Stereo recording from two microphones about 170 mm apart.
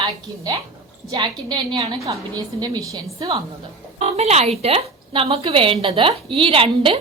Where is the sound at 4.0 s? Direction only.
40° right (ahead or behind).